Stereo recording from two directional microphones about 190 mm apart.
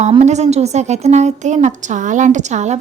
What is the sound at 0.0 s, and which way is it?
A woman's voice, 35° right (ahead or behind).